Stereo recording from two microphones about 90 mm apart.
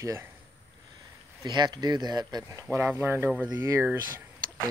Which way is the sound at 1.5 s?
50° right (ahead or behind).